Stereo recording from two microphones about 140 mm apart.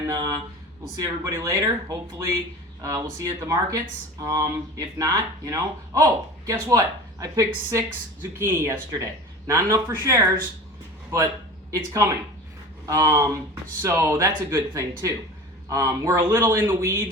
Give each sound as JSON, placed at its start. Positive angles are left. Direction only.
{"t": 0.1, "sound": "speech", "side_deg": -30}
{"t": 11.7, "sound": "speech", "side_deg": -25}